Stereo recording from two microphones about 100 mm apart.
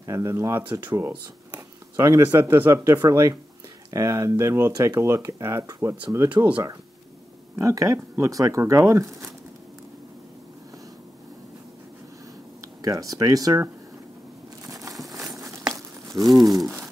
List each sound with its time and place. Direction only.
0.0 s speech: 35° right (ahead or behind)
0.6 s speech: 20° right (ahead or behind)
2.0 s speech: 30° right (ahead or behind)
6.2 s speech: 15° right (ahead or behind)
7.5 s speech: 35° right (ahead or behind)
12.8 s speech: 35° right (ahead or behind)
14.7 s crumpling: 35° right (ahead or behind)
15.2 s a sound: 30° right (ahead or behind)
16.3 s speech: centre (ahead or behind)
16.6 s a sound: 5° right (ahead or behind)